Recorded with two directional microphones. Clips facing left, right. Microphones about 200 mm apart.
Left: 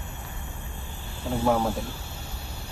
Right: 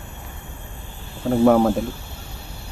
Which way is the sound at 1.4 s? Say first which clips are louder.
Right 8 dB; 55° right (ahead or behind).